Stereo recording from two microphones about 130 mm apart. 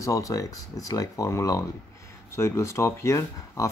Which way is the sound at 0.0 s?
25° left (ahead or behind).